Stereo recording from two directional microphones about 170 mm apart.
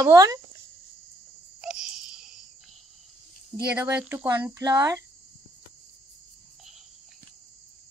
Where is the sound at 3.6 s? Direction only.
5° right (ahead or behind).